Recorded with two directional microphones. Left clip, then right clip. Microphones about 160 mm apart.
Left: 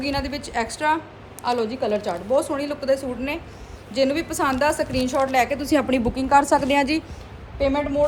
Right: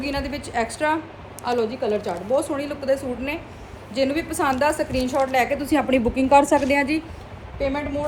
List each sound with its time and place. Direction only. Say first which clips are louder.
0.0 s a woman's voice: left 1 dB; 5° left (ahead or behind)